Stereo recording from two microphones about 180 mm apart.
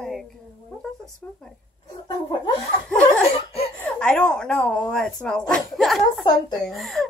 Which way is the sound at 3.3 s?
35° left (ahead or behind).